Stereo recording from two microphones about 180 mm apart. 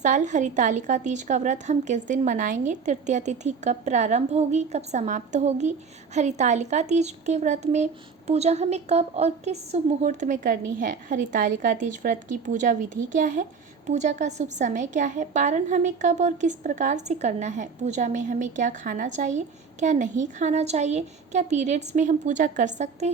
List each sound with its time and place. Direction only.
0.0 s a woman's voice: 40° right (ahead or behind)